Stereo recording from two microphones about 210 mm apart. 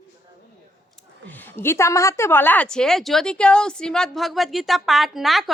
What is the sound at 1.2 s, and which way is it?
A woman's voice, 10° left (ahead or behind).